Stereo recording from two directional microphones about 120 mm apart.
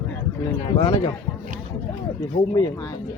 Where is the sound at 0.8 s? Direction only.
30° left (ahead or behind).